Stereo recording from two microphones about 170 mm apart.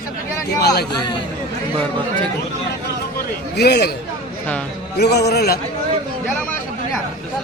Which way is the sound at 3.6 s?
70° left (ahead or behind).